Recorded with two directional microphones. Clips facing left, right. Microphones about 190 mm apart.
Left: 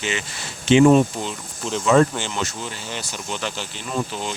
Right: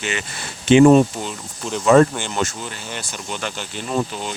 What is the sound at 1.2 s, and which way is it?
Speech, 5° right (ahead or behind).